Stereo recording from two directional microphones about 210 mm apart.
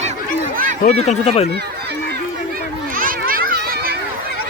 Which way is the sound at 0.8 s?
30° left (ahead or behind).